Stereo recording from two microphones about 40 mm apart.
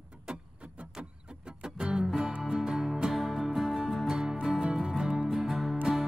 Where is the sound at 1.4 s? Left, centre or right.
Right.